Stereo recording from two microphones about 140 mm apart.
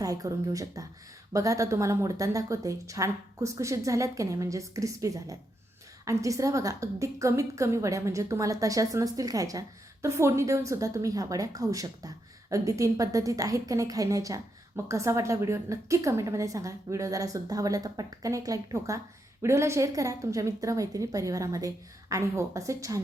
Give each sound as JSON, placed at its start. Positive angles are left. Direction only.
{"t": 0.0, "sound": "a woman's voice", "side_deg": -25}